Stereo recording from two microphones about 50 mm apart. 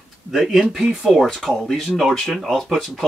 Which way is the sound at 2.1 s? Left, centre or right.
Centre.